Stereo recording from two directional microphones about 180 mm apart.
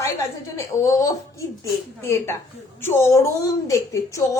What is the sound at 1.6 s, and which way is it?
A woman's voice, 15° left (ahead or behind).